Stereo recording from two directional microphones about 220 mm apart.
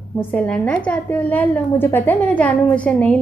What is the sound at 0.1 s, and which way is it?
Speech, 10° left (ahead or behind).